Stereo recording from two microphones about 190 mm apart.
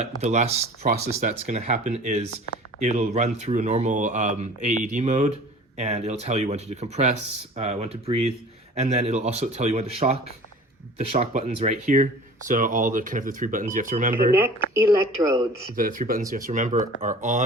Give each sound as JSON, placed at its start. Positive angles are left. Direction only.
{"t": 0.0, "sound": "speech", "side_deg": -40}
{"t": 0.9, "sound": "speech", "side_deg": -45}
{"t": 11.2, "sound": "speech", "side_deg": -35}
{"t": 14.7, "sound": "speech", "side_deg": -15}
{"t": 15.7, "sound": "speech", "side_deg": -45}